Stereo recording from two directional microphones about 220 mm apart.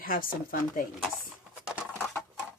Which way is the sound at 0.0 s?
40° left (ahead or behind).